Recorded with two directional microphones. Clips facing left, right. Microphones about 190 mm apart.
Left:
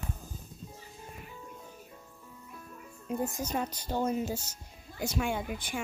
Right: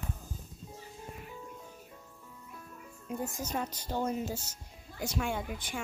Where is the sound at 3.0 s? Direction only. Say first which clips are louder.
Left 4 dB; 20° left (ahead or behind).